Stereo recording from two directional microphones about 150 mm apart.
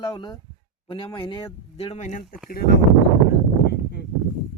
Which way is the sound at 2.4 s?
90° left.